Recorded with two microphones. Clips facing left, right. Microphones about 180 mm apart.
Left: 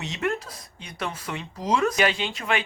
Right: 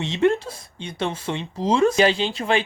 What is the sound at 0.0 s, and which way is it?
Speech, 25° right (ahead or behind).